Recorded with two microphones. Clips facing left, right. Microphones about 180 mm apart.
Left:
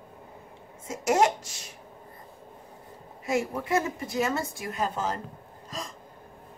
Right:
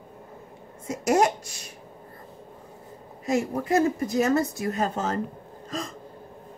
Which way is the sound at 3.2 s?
40° right (ahead or behind).